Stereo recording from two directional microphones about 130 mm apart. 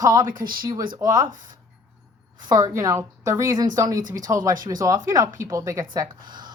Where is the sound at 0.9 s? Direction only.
25° right (ahead or behind).